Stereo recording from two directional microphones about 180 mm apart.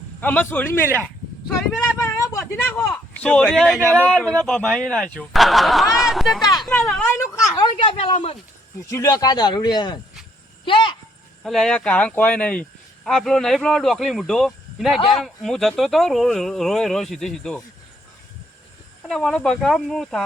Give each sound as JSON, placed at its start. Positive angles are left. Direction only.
{"t": 0.2, "sound": "speech", "side_deg": 10}
{"t": 2.0, "sound": "a man's voice", "side_deg": 15}
{"t": 6.4, "sound": "speech", "side_deg": 25}
{"t": 6.7, "sound": "a man's voice", "side_deg": 0}
{"t": 7.5, "sound": "speech", "side_deg": 25}
{"t": 8.9, "sound": "speech", "side_deg": 20}
{"t": 11.4, "sound": "a man's voice", "side_deg": 0}
{"t": 19.0, "sound": "a man's voice", "side_deg": 0}